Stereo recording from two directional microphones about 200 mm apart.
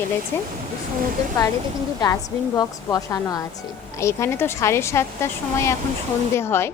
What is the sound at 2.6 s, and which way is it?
A woman's voice, 20° left (ahead or behind).